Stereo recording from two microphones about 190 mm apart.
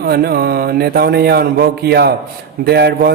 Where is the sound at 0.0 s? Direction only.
55° right (ahead or behind).